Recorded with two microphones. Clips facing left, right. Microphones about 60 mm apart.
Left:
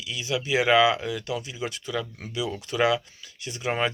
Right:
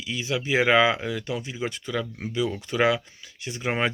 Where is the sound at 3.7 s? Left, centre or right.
Right.